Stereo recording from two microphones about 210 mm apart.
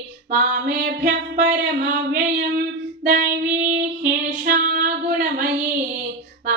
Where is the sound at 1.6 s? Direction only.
50° right (ahead or behind).